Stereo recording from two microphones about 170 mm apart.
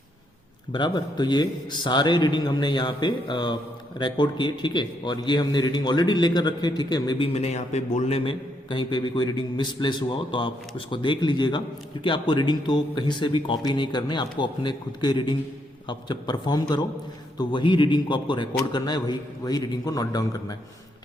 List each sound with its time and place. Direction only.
0.7 s a man's voice: 25° left (ahead or behind)
7.3 s a man's voice: 40° left (ahead or behind); by 20.6 s 20° left (ahead or behind)